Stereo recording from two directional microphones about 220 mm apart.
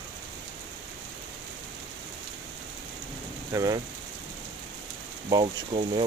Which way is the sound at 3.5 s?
15° right (ahead or behind).